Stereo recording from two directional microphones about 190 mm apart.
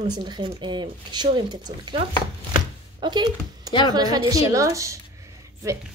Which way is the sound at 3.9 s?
20° right (ahead or behind).